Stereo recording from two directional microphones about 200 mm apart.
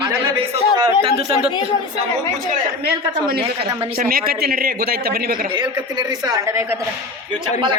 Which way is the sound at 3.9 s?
45° right (ahead or behind).